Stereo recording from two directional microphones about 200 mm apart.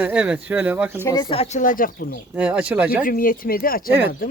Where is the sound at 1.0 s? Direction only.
20° left (ahead or behind); by 2.2 s 45° left (ahead or behind).